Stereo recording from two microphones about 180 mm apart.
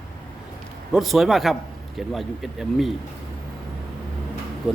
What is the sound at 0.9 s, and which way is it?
Speech, centre (ahead or behind).